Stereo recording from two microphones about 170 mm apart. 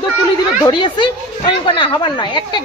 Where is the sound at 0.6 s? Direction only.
25° left (ahead or behind).